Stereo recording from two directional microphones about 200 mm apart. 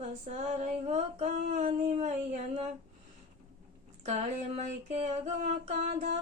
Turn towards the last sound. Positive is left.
turn(degrees=-35)  # may be behind; listen again after turning